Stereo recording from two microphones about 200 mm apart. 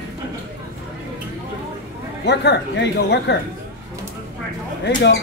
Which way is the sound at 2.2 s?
60° left (ahead or behind).